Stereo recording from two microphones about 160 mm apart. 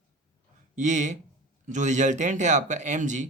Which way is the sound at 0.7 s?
50° right (ahead or behind).